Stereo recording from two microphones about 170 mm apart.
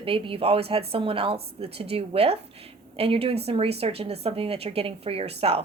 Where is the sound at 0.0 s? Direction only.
35° right (ahead or behind).